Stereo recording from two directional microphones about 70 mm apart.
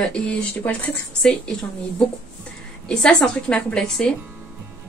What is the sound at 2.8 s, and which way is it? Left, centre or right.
A woman's voice, centre.